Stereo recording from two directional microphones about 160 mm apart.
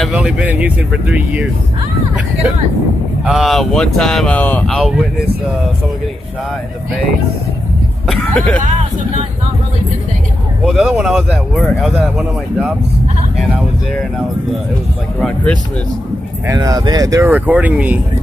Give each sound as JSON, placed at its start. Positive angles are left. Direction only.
{"t": 0.0, "sound": "speech", "side_deg": -5}
{"t": 3.3, "sound": "speech", "side_deg": 0}
{"t": 8.1, "sound": "speech", "side_deg": 10}
{"t": 10.6, "sound": "speech", "side_deg": -5}
{"t": 15.1, "sound": "speech", "side_deg": 5}
{"t": 16.4, "sound": "speech", "side_deg": -20}